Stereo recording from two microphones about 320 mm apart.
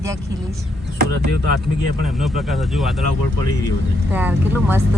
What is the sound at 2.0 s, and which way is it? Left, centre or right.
Speech, centre.